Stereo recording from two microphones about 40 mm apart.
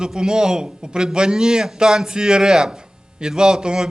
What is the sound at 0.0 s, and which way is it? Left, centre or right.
A man's voice, centre.